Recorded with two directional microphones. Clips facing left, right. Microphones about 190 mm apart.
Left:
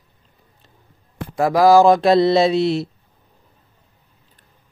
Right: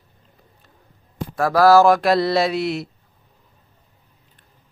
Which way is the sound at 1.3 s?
20° left (ahead or behind).